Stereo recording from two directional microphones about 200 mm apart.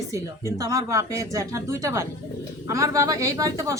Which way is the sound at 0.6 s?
15° right (ahead or behind).